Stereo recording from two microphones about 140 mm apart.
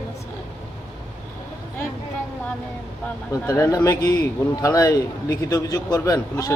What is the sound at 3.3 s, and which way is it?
Speech, 20° left (ahead or behind).